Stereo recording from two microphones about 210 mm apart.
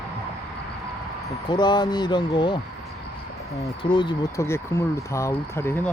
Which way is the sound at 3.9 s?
20° left (ahead or behind).